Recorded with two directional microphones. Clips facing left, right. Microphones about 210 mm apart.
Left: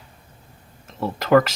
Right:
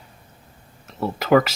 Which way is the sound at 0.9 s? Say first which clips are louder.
Even; centre (ahead or behind).